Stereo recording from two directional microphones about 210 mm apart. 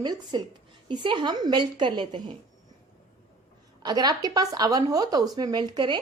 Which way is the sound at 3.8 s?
20° right (ahead or behind).